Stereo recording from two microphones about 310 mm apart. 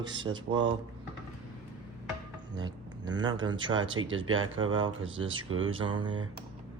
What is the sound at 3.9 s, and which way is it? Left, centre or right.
Speech, right.